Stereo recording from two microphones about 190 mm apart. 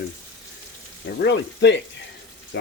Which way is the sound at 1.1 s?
65° left (ahead or behind).